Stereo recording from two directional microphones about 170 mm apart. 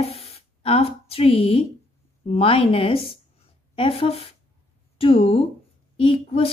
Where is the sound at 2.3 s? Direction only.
35° left (ahead or behind).